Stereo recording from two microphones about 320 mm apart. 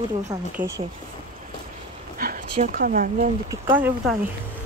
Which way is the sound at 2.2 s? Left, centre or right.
Right.